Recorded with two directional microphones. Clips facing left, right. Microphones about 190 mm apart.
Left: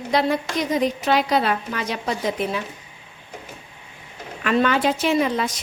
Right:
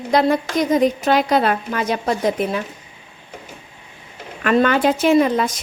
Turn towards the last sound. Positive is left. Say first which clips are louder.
# right 5 dB
turn(degrees=-45)  # may be behind; listen again after turning